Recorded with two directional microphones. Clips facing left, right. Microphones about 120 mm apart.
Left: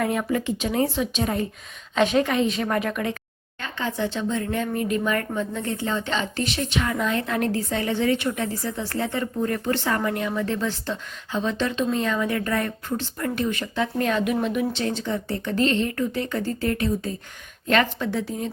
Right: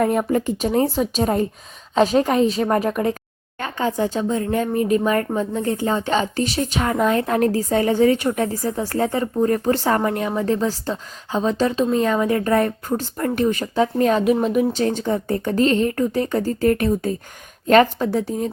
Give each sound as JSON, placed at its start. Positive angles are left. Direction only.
{"t": 0.0, "sound": "speech", "side_deg": -40}